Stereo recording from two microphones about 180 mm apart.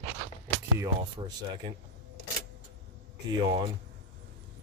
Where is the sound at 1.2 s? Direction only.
25° right (ahead or behind).